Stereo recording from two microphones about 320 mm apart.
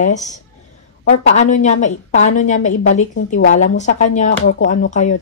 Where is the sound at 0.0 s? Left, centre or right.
Left.